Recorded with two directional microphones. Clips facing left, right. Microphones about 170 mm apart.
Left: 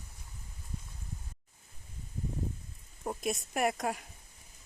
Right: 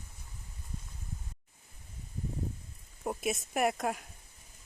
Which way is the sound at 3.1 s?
5° right (ahead or behind).